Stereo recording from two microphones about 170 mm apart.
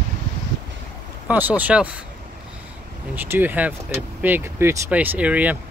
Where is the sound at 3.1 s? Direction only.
10° right (ahead or behind).